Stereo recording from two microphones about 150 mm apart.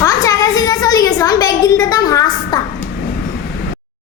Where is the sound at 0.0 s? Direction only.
25° left (ahead or behind).